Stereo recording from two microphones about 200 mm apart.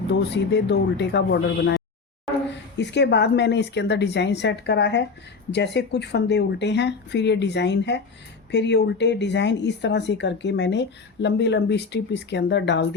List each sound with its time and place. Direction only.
0.1 s speech: 60° left (ahead or behind)